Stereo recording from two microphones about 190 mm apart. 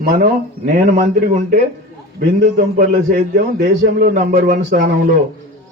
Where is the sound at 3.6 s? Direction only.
60° right (ahead or behind).